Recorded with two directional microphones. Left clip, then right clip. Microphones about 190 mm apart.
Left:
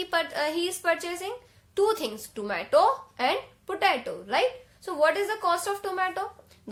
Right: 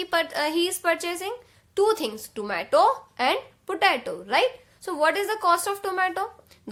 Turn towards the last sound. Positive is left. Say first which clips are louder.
# right 3 dB
turn(degrees=-40)  # may be behind; listen again after turning